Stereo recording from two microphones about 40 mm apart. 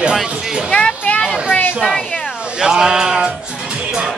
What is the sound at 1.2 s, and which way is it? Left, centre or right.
Music, centre.